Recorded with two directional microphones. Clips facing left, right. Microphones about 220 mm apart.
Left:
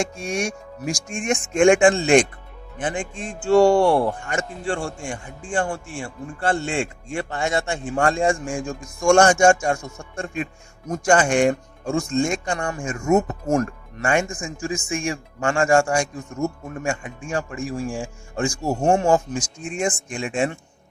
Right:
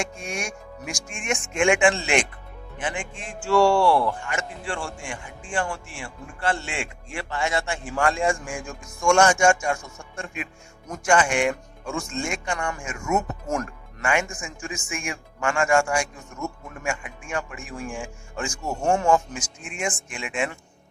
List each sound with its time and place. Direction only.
0.2 s speech: 30° left (ahead or behind)
3.8 s speech: 20° left (ahead or behind)
4.0 s speech: 35° left (ahead or behind)
7.3 s speech: 50° left (ahead or behind)
7.5 s speech: 30° left (ahead or behind)
9.0 s speech: 40° left (ahead or behind)